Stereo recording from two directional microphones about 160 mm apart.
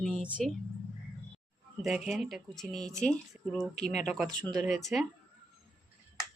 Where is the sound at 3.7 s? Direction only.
45° left (ahead or behind).